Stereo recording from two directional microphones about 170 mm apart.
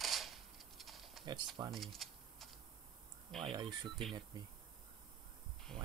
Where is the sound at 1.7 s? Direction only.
Centre (ahead or behind).